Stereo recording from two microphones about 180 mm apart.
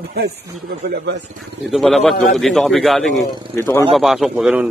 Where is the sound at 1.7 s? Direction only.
Centre (ahead or behind).